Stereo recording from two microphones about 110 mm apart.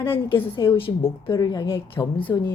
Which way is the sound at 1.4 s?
35° left (ahead or behind).